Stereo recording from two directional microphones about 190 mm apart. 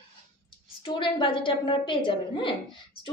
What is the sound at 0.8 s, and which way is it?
A woman's voice, 25° left (ahead or behind).